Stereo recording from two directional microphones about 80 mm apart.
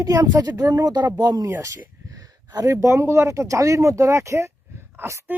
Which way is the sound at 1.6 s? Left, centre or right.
Right.